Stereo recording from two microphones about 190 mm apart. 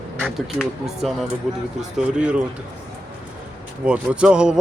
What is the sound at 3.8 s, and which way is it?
Speech, 5° right (ahead or behind).